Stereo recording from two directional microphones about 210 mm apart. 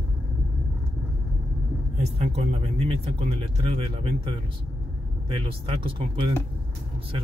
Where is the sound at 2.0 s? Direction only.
30° right (ahead or behind).